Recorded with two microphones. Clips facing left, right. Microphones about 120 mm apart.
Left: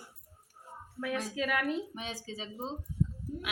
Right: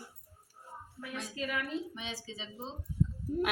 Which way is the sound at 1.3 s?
90° left.